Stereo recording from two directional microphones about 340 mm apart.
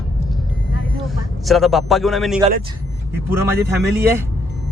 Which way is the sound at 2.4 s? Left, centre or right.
Centre.